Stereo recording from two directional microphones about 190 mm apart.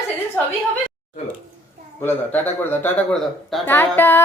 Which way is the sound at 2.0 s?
10° left (ahead or behind).